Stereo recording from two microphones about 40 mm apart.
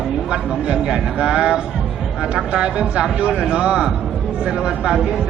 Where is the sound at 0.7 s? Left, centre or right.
Right.